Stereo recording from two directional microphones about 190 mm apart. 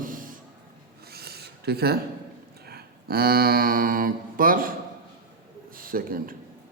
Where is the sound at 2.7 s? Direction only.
55° right (ahead or behind).